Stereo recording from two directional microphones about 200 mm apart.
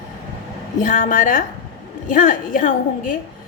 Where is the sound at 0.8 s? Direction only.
45° left (ahead or behind).